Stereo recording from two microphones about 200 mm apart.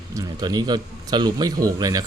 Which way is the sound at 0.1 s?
20° right (ahead or behind).